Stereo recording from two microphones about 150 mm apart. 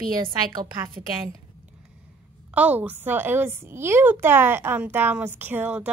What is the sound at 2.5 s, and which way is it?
A woman's voice, 10° right (ahead or behind).